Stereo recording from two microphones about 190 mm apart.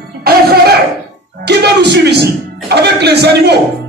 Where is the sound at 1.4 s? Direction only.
60° right (ahead or behind).